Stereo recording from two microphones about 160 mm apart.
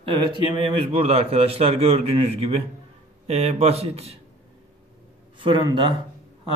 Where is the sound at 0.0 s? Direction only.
30° right (ahead or behind).